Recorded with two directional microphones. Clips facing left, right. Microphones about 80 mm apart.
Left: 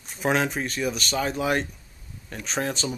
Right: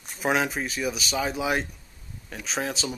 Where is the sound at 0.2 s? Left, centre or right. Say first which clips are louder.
Left 1 dB; centre.